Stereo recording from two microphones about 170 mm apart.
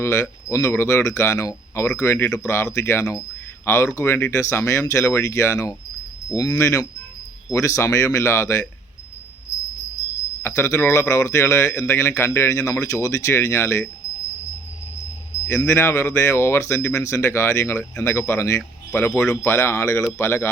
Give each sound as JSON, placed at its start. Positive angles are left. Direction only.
{"t": 0.0, "sound": "speech", "side_deg": 15}
{"t": 10.4, "sound": "speech", "side_deg": 15}
{"t": 15.5, "sound": "speech", "side_deg": 15}